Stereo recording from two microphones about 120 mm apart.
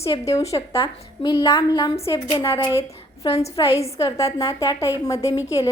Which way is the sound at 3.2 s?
55° left (ahead or behind).